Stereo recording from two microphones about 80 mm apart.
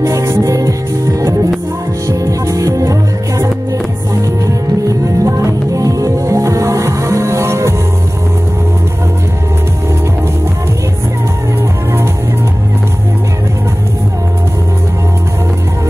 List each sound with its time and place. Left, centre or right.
0.0 s music: right
4.8 s music: right